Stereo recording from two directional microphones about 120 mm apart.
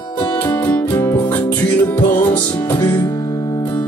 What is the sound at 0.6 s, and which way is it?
Music, 15° left (ahead or behind).